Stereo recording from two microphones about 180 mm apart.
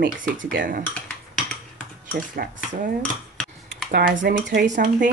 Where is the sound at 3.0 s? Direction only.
5° left (ahead or behind).